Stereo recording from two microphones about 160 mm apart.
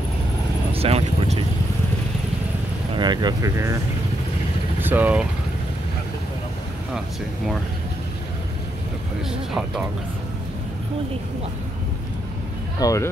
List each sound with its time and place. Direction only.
0.7 s vehicle: 40° right (ahead or behind)
3.0 s speech: 25° right (ahead or behind)
4.8 s speech: 10° right (ahead or behind)
9.3 s speech: 5° right (ahead or behind)
12.8 s speech: 20° left (ahead or behind)